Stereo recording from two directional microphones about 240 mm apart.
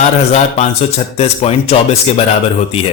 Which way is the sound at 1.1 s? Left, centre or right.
Left.